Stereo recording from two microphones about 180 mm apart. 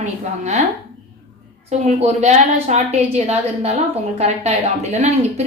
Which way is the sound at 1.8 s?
35° right (ahead or behind).